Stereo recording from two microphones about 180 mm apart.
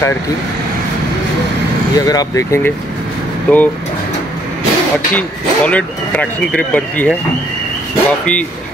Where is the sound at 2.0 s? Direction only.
20° left (ahead or behind).